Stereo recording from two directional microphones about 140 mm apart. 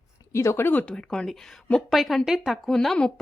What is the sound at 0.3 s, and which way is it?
A woman's voice, 20° left (ahead or behind).